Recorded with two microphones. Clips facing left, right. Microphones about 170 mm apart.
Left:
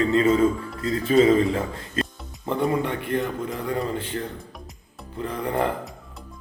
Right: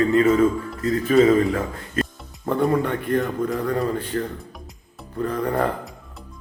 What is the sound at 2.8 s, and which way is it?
A man's voice, 50° right (ahead or behind).